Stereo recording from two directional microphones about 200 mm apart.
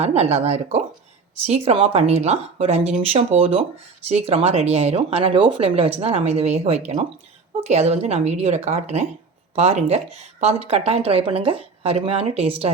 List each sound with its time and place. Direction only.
0.0 s a woman's voice: 30° right (ahead or behind)